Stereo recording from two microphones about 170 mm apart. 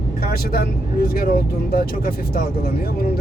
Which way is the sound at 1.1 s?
65° left (ahead or behind).